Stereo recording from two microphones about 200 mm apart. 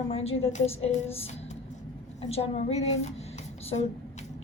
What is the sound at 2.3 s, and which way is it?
Speech, 30° left (ahead or behind).